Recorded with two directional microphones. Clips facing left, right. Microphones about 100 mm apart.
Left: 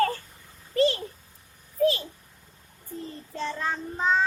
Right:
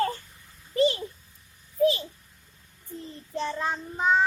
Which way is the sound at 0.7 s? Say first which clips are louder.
Even; 15° right (ahead or behind).